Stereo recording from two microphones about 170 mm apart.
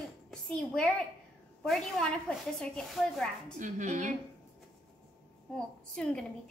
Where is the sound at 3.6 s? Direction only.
45° right (ahead or behind).